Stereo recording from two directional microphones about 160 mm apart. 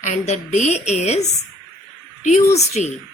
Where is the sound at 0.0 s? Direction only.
45° left (ahead or behind).